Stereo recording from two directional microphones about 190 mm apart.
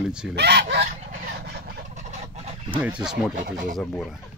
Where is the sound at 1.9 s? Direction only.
40° right (ahead or behind).